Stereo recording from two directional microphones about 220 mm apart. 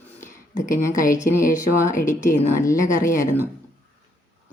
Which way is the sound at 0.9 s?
35° left (ahead or behind).